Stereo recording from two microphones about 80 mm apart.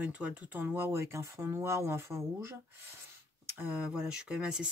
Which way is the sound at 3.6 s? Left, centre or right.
Centre.